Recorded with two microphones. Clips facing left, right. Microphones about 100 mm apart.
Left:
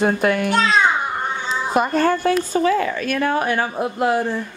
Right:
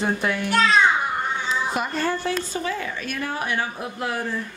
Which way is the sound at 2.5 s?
65° left (ahead or behind).